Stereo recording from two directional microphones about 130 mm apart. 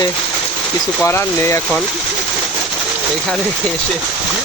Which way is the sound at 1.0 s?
20° left (ahead or behind).